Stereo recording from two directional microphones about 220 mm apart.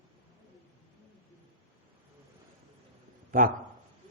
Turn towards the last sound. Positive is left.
turn(degrees=-40)  # may be behind; listen again after turning